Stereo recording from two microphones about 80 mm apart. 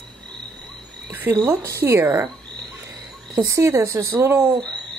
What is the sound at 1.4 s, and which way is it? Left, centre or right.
Speech, right.